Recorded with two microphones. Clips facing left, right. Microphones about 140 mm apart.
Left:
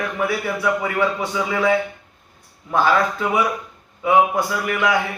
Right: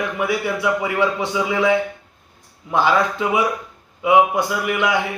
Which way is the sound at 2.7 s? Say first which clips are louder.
Even; 15° right (ahead or behind).